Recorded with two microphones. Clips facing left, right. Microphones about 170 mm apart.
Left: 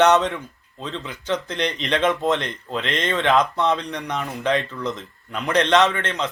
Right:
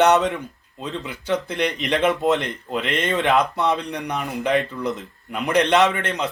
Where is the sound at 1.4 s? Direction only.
10° right (ahead or behind).